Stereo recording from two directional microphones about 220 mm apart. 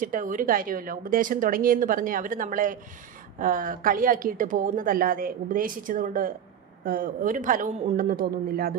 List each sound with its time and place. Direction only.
0.0 s a woman's voice: 35° right (ahead or behind)